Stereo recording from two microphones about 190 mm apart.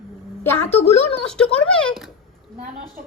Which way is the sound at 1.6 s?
5° left (ahead or behind).